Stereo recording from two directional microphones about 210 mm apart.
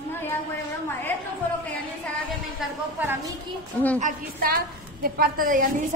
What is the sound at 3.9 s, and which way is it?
A woman's voice, 40° right (ahead or behind).